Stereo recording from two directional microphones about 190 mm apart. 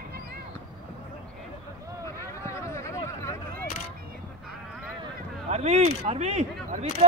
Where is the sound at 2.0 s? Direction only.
15° left (ahead or behind).